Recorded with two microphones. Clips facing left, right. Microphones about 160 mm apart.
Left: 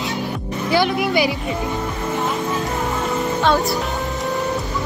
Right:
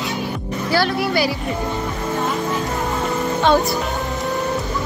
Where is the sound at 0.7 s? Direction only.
20° left (ahead or behind).